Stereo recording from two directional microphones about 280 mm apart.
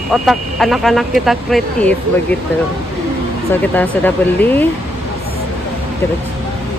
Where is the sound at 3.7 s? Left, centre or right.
Centre.